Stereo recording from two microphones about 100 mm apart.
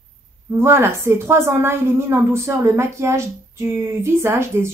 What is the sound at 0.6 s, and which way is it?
A woman's voice, 25° right (ahead or behind).